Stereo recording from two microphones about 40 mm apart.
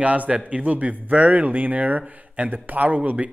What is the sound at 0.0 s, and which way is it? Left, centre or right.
Speech, right.